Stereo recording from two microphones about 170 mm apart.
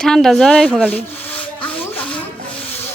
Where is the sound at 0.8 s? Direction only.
10° left (ahead or behind).